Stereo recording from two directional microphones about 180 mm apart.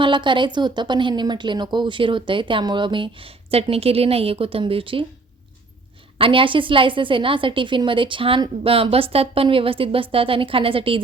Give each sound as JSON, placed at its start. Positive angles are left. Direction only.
{"t": 0.0, "sound": "speech", "side_deg": -25}
{"t": 6.1, "sound": "speech", "side_deg": -30}